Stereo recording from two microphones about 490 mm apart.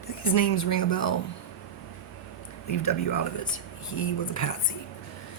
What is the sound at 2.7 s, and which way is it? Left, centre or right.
Speech, left.